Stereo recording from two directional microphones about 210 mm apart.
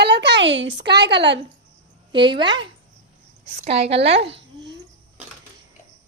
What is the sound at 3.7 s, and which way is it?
Speech, 30° right (ahead or behind).